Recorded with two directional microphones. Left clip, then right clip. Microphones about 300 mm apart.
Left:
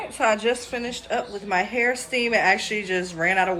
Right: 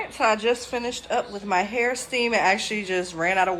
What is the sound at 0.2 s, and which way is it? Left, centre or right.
A woman's voice, centre.